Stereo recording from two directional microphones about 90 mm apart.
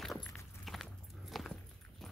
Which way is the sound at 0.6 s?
Centre (ahead or behind).